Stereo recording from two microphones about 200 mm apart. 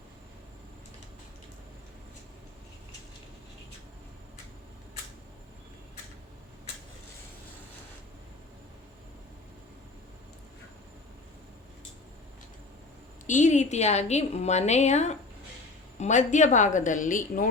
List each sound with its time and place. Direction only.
13.2 s a woman's voice: 35° left (ahead or behind)